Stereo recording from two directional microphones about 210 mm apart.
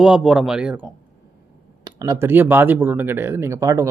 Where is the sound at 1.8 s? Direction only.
20° right (ahead or behind).